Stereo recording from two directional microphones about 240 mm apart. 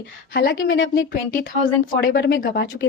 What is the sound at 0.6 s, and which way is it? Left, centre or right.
A woman's voice, left.